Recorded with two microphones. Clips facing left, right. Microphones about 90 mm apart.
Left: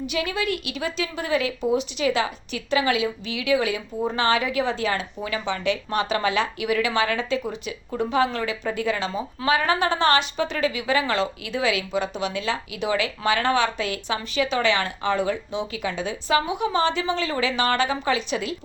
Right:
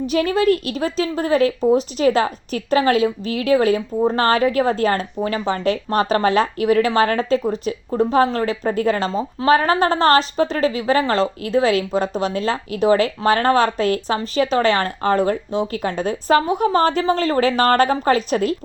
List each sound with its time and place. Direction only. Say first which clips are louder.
0.0 s a woman's voice: right 9 dB; 40° right (ahead or behind)